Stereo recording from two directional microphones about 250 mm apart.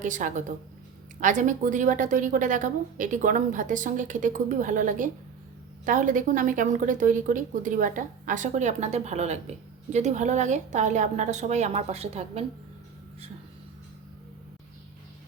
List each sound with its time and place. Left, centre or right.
0.0 s a woman's voice: right